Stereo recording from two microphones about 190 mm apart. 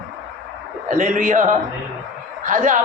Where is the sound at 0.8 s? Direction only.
45° right (ahead or behind).